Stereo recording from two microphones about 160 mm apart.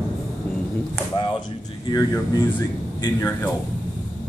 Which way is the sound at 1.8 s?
25° left (ahead or behind).